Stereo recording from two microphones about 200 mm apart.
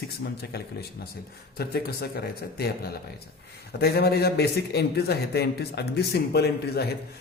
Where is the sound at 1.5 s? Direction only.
50° left (ahead or behind).